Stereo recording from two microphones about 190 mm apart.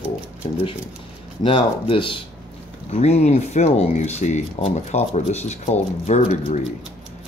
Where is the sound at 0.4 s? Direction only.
30° left (ahead or behind).